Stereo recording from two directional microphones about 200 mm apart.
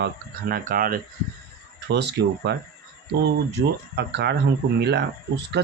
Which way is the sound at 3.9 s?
55° right (ahead or behind).